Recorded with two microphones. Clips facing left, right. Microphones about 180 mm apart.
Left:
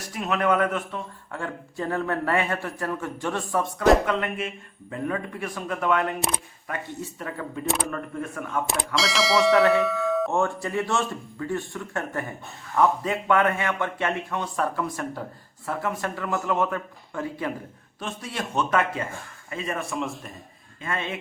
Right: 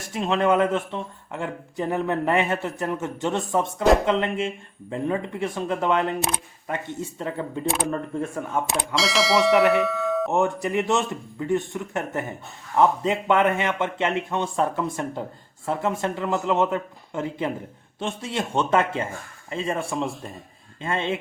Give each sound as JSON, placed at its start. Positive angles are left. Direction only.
{"t": 0.0, "sound": "speech", "side_deg": -25}
{"t": 9.0, "sound": "speech", "side_deg": 0}
{"t": 10.3, "sound": "speech", "side_deg": -20}